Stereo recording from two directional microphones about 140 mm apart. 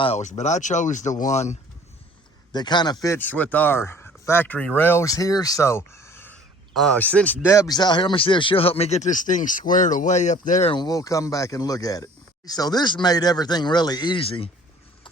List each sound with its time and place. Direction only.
0.0 s speech: 50° left (ahead or behind)
2.5 s a man's voice: 30° left (ahead or behind)
3.2 s speech: 10° left (ahead or behind)
6.7 s speech: 5° left (ahead or behind)
7.5 s speech: 25° left (ahead or behind); by 10.7 s 60° left (ahead or behind)
10.7 s speech: 30° left (ahead or behind)